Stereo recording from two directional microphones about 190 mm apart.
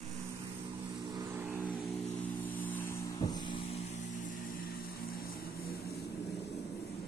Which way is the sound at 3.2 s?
25° left (ahead or behind).